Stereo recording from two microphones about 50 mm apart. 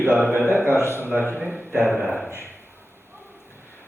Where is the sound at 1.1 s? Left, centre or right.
Left.